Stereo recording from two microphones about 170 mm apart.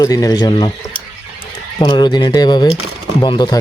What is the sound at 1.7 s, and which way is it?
Speech, 25° left (ahead or behind).